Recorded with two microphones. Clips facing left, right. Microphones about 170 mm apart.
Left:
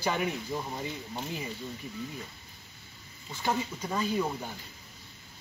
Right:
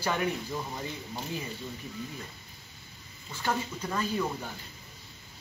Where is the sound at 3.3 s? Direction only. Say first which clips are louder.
Left 1 dB; 15° left (ahead or behind).